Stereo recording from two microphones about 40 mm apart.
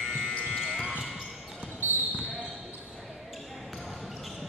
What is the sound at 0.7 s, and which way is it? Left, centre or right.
Basketball bounce, centre.